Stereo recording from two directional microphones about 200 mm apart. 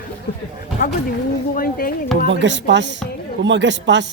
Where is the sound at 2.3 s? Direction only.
65° right (ahead or behind).